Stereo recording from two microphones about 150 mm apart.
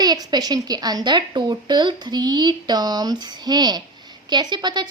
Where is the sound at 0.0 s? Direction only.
25° right (ahead or behind).